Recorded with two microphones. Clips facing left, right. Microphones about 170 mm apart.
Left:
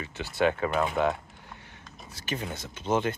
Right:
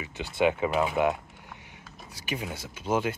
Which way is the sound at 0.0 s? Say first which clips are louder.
Right 1 dB; 15° right (ahead or behind).